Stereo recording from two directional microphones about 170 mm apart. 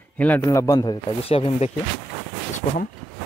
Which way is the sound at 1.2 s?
35° left (ahead or behind).